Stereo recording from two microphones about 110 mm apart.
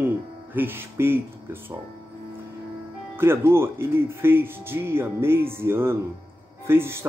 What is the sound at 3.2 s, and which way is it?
Speech, 20° right (ahead or behind).